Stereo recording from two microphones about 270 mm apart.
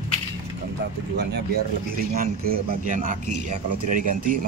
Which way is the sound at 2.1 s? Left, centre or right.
Right.